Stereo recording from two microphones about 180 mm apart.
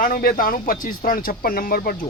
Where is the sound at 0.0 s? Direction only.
50° left (ahead or behind).